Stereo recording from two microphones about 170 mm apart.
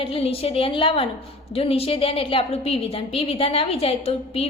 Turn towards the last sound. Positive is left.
turn(degrees=35)  # may be behind; listen again after turning